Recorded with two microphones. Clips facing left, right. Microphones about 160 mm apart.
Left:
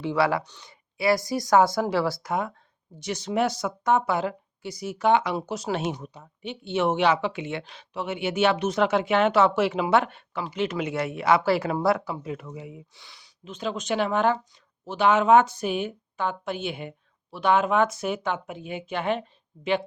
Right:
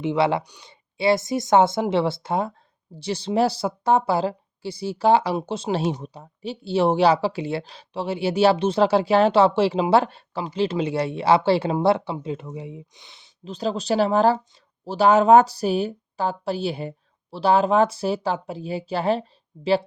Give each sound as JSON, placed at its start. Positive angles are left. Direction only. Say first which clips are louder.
{"t": 0.0, "sound": "speech", "louder": "right 3 dB", "side_deg": -20}
{"t": 0.4, "sound": "speech", "louder": "right 1 dB", "side_deg": -15}
{"t": 0.7, "sound": "speech", "louder": "right 3 dB", "side_deg": -25}